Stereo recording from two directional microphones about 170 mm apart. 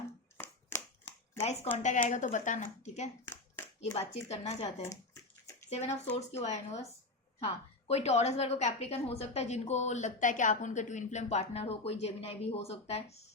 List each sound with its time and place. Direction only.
0.3 s a sound: 10° left (ahead or behind)
1.4 s a woman's voice: 35° left (ahead or behind)
4.1 s a woman's voice: 40° left (ahead or behind)
4.9 s bathtub: 20° left (ahead or behind)
5.7 s a woman's voice: 40° left (ahead or behind)